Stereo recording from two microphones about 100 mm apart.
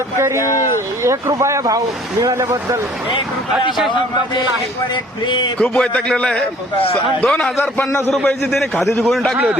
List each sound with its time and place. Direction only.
0.3 s speech: 30° left (ahead or behind)
1.0 s speech: 30° right (ahead or behind)
5.5 s a man's voice: 5° left (ahead or behind)
7.6 s a man's voice: 20° left (ahead or behind)
8.1 s a man's voice: 5° left (ahead or behind)